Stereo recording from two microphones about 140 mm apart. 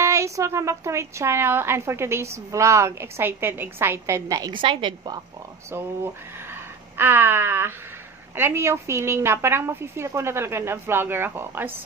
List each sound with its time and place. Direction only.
0.0 s a woman's voice: 20° right (ahead or behind)
5.7 s a woman's voice: 20° right (ahead or behind)